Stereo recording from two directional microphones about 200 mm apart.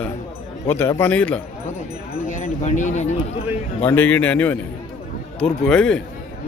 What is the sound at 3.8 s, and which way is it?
A man's voice, 10° left (ahead or behind).